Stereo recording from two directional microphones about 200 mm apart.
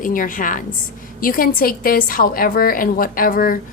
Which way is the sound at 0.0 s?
40° left (ahead or behind).